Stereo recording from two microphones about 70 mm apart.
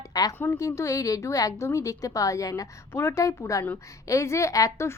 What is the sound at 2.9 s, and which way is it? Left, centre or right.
A woman's voice, left.